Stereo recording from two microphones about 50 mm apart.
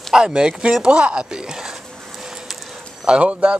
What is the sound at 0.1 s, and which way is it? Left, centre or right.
Speech, centre.